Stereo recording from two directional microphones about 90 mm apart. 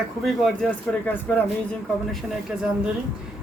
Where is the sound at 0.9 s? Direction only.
20° left (ahead or behind).